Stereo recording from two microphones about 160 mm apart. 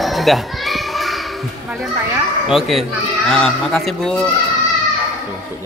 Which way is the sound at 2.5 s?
Centre (ahead or behind).